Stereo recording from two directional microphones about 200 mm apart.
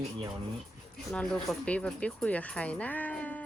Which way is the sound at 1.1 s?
5° left (ahead or behind).